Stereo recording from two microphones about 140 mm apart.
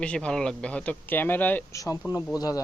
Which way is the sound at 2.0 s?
10° right (ahead or behind).